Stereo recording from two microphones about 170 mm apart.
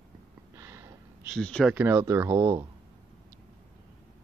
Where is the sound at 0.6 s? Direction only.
15° right (ahead or behind).